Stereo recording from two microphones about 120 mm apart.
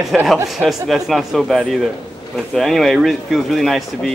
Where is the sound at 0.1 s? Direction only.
Centre (ahead or behind).